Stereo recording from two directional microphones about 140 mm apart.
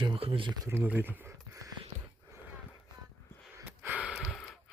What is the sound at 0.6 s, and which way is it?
Speech, 15° right (ahead or behind).